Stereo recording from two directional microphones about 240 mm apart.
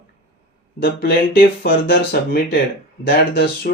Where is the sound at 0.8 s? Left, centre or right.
Left.